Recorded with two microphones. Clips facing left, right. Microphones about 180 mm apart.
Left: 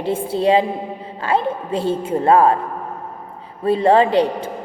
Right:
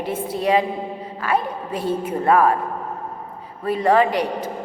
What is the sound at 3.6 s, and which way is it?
Speech, 30° left (ahead or behind).